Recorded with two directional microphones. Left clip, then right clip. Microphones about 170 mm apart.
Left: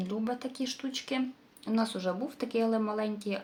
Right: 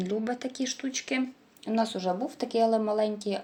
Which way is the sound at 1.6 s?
5° left (ahead or behind).